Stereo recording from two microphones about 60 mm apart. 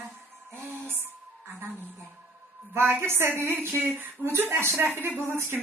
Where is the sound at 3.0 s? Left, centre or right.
Right.